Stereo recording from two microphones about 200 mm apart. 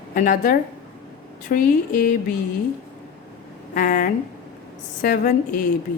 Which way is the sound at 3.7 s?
45° left (ahead or behind).